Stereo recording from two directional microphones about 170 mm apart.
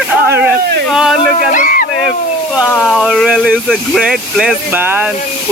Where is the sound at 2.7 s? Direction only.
5° left (ahead or behind).